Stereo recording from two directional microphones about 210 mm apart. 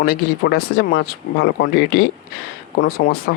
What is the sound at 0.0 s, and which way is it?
Speech, 50° left (ahead or behind).